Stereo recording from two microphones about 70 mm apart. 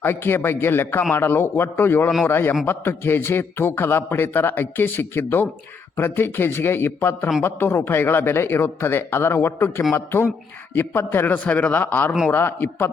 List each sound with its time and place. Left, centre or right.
0.0 s a man's voice: left
11.4 s a man's voice: left